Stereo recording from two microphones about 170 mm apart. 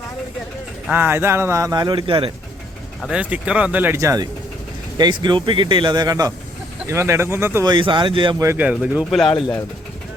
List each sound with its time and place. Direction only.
0.9 s speech: 10° right (ahead or behind); by 2.3 s 30° right (ahead or behind)
3.1 s speech: 5° right (ahead or behind); by 8.4 s 30° right (ahead or behind)
8.4 s speech: 10° right (ahead or behind)